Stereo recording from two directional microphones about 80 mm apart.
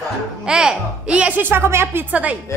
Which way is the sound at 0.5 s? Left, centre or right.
Centre.